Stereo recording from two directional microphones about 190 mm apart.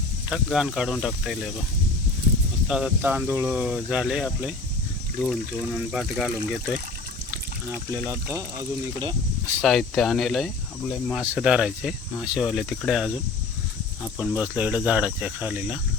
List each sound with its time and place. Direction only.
0.3 s speech: 5° right (ahead or behind)
2.6 s speech: 5° right (ahead or behind)
8.3 s speech: 15° right (ahead or behind)
9.6 s speech: centre (ahead or behind)
14.2 s speech: 10° right (ahead or behind)